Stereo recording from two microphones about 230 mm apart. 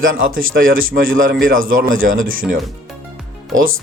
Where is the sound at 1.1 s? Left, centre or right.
Right.